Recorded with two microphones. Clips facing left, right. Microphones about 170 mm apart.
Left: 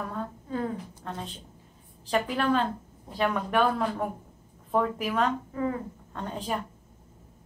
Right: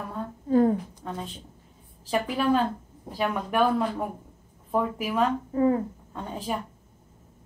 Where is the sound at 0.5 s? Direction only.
40° right (ahead or behind).